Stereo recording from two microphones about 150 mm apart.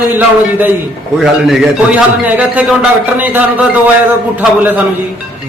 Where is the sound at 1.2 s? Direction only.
Centre (ahead or behind).